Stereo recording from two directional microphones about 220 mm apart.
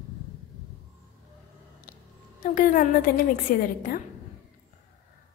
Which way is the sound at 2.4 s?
40° left (ahead or behind).